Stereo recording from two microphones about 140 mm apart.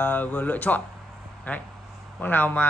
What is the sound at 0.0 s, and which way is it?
A man's voice, 15° left (ahead or behind).